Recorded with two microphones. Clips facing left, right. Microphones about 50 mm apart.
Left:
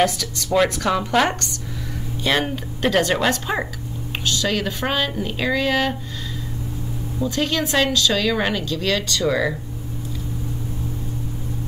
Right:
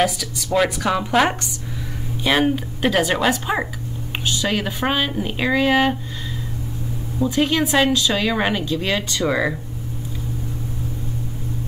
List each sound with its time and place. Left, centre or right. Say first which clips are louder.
0.0 s speech: even; centre
7.2 s speech: right 3 dB; centre